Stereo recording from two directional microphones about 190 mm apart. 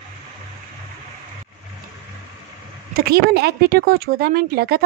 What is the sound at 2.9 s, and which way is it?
Speech, 55° right (ahead or behind).